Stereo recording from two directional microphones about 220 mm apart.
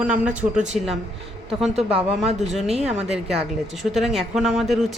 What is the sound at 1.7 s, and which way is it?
Speech, 25° right (ahead or behind).